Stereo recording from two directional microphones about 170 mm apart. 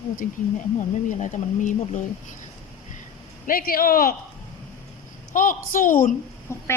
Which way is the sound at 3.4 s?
60° left (ahead or behind).